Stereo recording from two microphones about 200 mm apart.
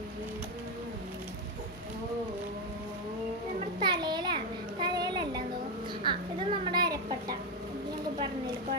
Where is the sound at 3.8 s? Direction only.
20° right (ahead or behind).